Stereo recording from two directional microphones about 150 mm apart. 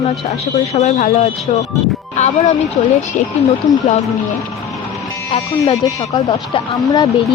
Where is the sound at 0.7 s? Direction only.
50° left (ahead or behind).